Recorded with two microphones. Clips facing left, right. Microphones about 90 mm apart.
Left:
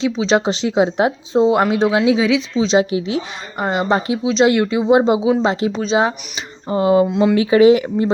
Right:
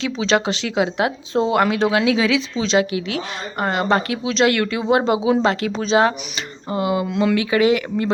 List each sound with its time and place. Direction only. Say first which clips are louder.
0.3 s speech: left 1 dB; 25° left (ahead or behind)
5.8 s speech: right 3 dB; 5° left (ahead or behind)
6.7 s speech: left 7 dB; 35° left (ahead or behind)